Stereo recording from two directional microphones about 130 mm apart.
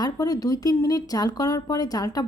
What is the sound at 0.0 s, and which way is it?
Speech, 30° left (ahead or behind).